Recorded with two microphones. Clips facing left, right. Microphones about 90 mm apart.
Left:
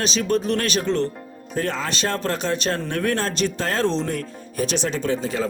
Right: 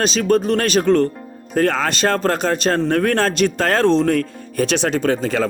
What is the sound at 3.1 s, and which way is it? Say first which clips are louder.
Speech: right 6 dB; 75° right (ahead or behind).